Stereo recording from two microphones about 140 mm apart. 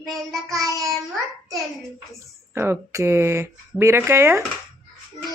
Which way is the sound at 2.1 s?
20° right (ahead or behind).